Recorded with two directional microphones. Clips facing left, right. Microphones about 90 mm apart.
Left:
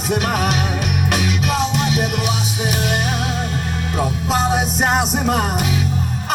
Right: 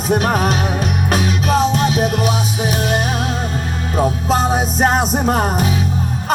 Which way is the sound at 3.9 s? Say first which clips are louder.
Right 4 dB; 35° right (ahead or behind).